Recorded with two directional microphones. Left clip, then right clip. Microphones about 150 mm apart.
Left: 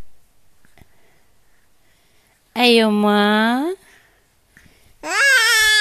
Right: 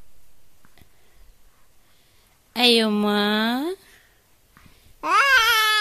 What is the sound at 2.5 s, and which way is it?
A woman's voice, 25° left (ahead or behind).